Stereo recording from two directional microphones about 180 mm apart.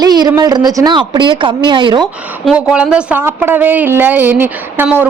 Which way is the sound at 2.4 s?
5° right (ahead or behind).